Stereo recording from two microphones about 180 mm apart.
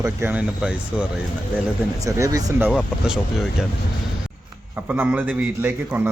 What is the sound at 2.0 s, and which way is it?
Speech, 20° right (ahead or behind).